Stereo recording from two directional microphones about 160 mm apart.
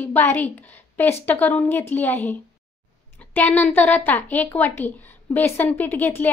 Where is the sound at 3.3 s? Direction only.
10° left (ahead or behind).